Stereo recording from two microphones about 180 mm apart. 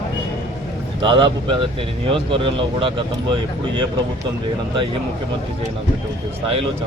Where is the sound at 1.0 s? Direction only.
30° right (ahead or behind).